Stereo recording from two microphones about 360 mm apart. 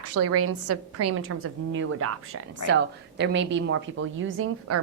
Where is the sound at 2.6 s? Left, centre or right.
Left.